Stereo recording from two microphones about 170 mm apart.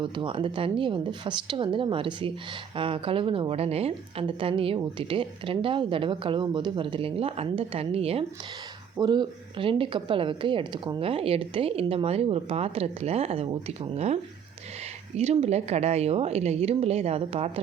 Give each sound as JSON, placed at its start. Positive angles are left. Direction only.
{"t": 0.0, "sound": "a woman's voice", "side_deg": -30}